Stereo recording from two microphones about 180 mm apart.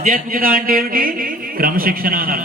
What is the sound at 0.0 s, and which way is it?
A man's voice, 50° right (ahead or behind).